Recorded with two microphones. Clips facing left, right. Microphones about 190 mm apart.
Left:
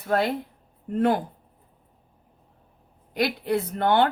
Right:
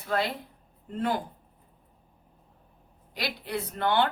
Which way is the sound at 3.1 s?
50° left (ahead or behind).